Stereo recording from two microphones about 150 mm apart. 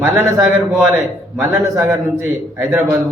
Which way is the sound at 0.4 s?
20° right (ahead or behind).